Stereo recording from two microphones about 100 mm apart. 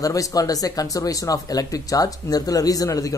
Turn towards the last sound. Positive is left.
turn(degrees=35)  # may be behind; listen again after turning